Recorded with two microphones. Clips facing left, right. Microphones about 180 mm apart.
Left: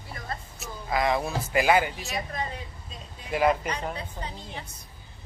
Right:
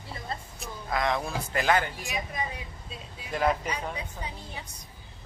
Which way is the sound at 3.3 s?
5° left (ahead or behind).